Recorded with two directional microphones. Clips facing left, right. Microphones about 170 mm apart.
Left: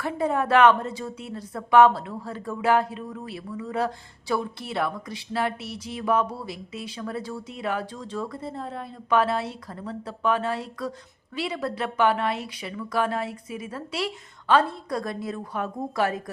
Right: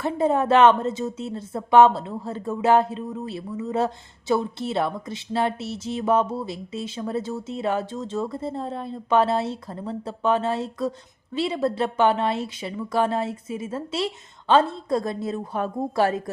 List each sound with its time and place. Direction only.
0.0 s a woman's voice: 25° right (ahead or behind)